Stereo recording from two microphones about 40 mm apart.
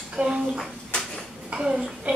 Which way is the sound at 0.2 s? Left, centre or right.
Right.